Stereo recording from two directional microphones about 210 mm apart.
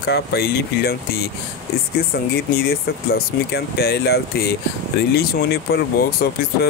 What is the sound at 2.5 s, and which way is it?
Speech, 45° left (ahead or behind).